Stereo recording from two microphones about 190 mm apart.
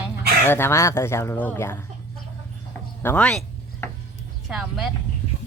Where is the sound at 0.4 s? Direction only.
10° left (ahead or behind).